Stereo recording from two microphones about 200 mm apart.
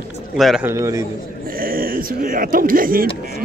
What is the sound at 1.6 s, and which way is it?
Speech, 45° right (ahead or behind).